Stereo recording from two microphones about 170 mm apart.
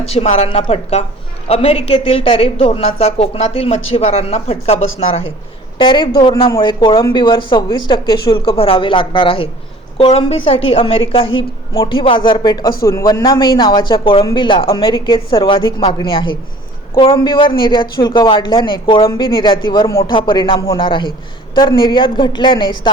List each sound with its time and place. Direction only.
0.0 s a woman's voice: 35° left (ahead or behind)